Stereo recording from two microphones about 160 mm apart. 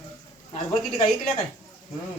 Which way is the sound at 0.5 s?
40° left (ahead or behind).